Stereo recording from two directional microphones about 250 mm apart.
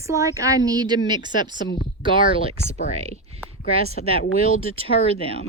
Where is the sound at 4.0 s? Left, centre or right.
Left.